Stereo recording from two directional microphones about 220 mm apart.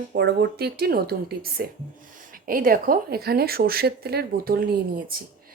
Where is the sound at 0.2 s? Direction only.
50° right (ahead or behind).